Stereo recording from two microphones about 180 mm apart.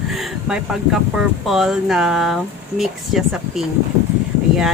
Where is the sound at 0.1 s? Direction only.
5° right (ahead or behind).